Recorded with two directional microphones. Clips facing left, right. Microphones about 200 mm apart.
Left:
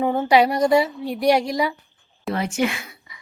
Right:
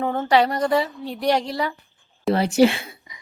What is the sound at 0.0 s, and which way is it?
A woman's voice, 10° left (ahead or behind).